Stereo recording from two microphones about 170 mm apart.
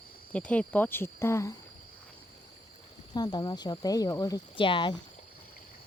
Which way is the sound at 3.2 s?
25° left (ahead or behind).